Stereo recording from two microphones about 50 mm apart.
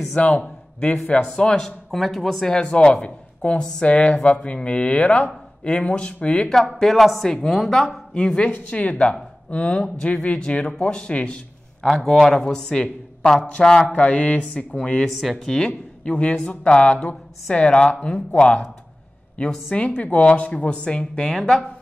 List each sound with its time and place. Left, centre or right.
0.1 s a man's voice: left
1.9 s speech: centre
2.6 s speech: left
6.5 s speech: centre
8.4 s speech: left
11.9 s speech: centre; by 14.8 s left
15.0 s speech: centre; by 21.3 s left
21.3 s speech: centre